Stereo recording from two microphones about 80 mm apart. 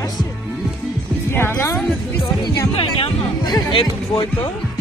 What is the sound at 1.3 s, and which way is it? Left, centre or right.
Music, left.